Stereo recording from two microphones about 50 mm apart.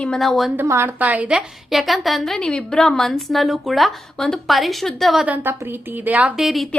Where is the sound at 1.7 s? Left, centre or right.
Centre.